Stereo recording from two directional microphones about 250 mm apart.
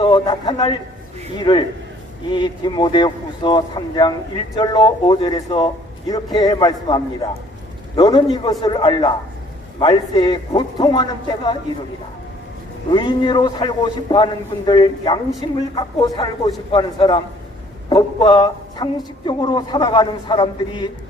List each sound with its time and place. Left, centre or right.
0.0 s a man's voice: centre
12.9 s a woman's voice: centre